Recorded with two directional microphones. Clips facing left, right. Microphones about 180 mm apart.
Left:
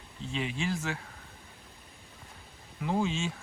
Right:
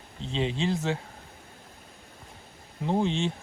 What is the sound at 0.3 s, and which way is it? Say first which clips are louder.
Speech: right 5 dB; 25° right (ahead or behind).